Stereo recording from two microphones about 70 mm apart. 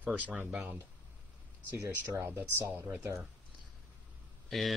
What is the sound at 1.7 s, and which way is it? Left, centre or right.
Speech, right.